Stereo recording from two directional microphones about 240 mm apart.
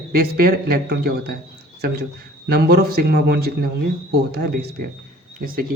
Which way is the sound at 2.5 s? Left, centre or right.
Right.